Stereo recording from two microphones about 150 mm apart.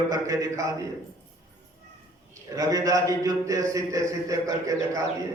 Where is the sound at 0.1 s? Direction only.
20° right (ahead or behind).